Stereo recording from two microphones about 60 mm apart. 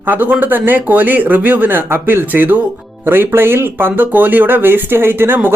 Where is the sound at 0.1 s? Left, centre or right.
Right.